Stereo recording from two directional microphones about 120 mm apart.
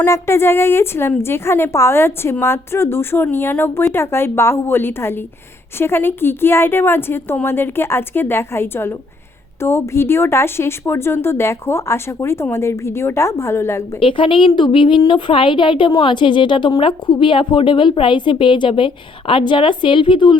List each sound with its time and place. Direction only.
0.0 s speech: 20° left (ahead or behind)
14.0 s a woman's voice: 45° left (ahead or behind)